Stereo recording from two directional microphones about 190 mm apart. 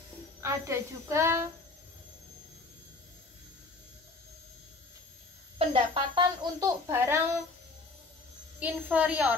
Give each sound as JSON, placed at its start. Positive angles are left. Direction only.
{"t": 0.4, "sound": "speech", "side_deg": -15}
{"t": 5.6, "sound": "speech", "side_deg": -25}
{"t": 8.5, "sound": "speech", "side_deg": -10}